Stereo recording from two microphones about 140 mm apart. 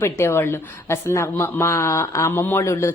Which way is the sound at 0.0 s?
15° left (ahead or behind).